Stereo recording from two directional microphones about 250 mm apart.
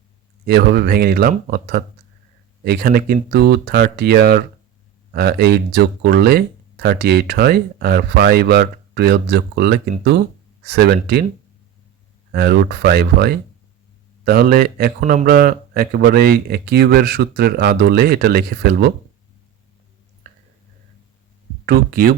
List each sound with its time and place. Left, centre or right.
0.4 s speech: right
12.3 s speech: right
21.7 s speech: right